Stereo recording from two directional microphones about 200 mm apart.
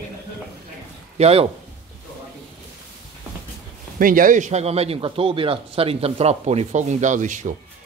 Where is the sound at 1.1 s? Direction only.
30° right (ahead or behind).